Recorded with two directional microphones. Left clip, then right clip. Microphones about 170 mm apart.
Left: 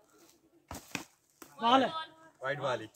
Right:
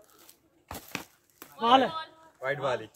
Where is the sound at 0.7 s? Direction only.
25° right (ahead or behind).